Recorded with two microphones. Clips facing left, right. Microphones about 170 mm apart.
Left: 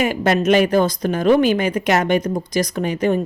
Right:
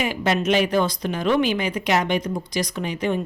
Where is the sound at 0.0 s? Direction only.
50° left (ahead or behind).